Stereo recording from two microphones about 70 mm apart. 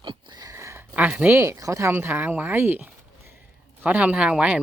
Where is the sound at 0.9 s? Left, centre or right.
Right.